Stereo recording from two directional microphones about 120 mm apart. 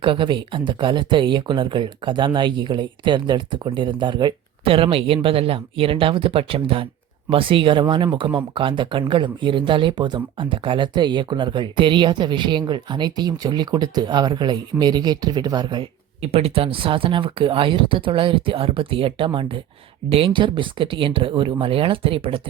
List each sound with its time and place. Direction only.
0.0 s speech: 45° right (ahead or behind)
16.2 s speech: 55° right (ahead or behind)